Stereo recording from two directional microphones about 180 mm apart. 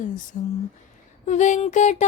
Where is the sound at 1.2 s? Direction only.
40° left (ahead or behind).